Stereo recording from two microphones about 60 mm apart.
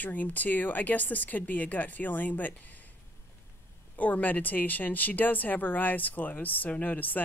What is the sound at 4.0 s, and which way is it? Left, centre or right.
Speech, left.